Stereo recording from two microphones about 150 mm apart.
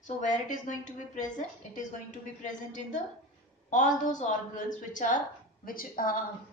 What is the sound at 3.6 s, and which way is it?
A woman's voice, 55° left (ahead or behind).